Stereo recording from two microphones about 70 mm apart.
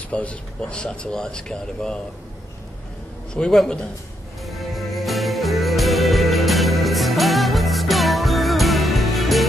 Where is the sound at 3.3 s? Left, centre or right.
Centre.